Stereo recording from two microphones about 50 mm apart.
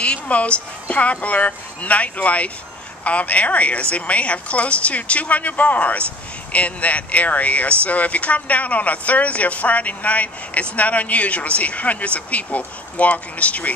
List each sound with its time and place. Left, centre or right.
0.0 s speech: left